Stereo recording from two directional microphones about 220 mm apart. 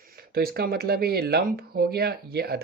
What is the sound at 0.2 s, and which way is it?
A woman's voice, 45° right (ahead or behind).